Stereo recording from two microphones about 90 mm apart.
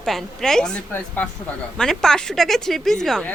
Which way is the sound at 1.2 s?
20° left (ahead or behind).